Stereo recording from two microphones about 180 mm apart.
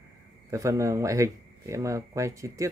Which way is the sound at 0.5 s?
15° right (ahead or behind).